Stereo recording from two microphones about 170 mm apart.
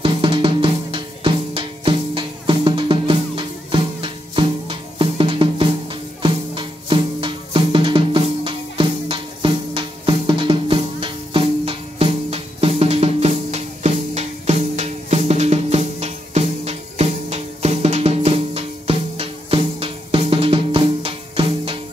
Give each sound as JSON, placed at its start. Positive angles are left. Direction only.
{"t": 0.0, "sound": "music", "side_deg": -30}